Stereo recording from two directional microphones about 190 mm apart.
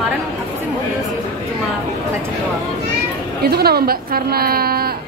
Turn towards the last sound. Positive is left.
turn(degrees=-55)  # may be behind; listen again after turning